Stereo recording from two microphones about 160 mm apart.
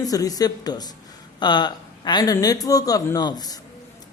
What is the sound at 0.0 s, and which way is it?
A man's voice, 20° left (ahead or behind).